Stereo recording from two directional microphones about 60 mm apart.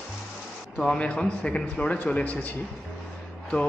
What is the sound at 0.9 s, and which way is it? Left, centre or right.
A man's voice, centre.